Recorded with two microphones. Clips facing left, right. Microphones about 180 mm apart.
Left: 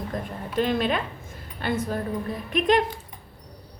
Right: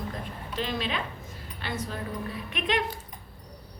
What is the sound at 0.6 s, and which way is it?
A woman's voice, 55° left (ahead or behind).